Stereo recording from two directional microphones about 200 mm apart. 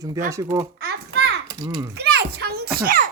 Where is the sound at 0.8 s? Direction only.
55° right (ahead or behind).